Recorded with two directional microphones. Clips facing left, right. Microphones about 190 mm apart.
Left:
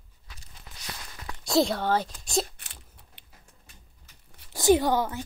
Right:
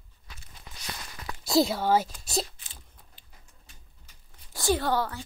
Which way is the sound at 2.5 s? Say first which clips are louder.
Left 1 dB; 65° left (ahead or behind).